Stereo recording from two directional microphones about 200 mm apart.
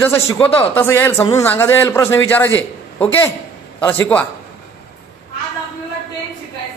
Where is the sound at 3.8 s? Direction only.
10° left (ahead or behind).